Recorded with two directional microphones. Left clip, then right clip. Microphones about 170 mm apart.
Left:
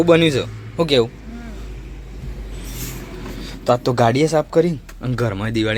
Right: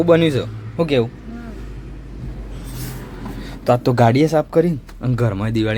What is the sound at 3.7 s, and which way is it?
Speech, 25° right (ahead or behind).